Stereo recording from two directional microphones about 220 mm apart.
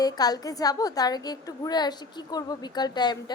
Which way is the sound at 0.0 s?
15° left (ahead or behind).